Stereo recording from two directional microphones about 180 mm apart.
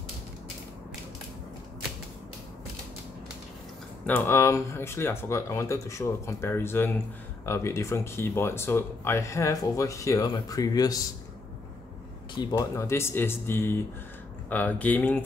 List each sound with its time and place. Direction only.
4.0 s speech: 10° left (ahead or behind)
12.4 s speech: 20° left (ahead or behind)